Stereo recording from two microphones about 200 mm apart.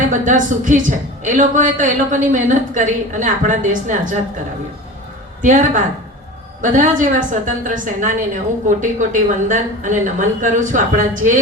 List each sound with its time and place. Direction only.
0.0 s a man's voice: 40° right (ahead or behind)
5.4 s a man's voice: 40° right (ahead or behind)